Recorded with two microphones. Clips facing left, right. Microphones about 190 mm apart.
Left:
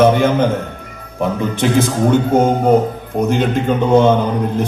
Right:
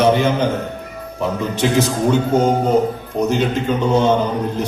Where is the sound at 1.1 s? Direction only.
55° left (ahead or behind).